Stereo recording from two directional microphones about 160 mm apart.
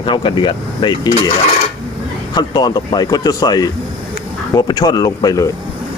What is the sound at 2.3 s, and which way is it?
Speech, 25° left (ahead or behind).